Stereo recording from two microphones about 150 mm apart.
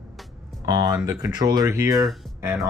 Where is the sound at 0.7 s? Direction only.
25° right (ahead or behind).